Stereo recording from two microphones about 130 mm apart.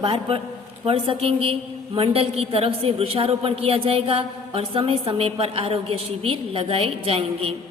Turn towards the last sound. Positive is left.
turn(degrees=-50)  # may be behind; listen again after turning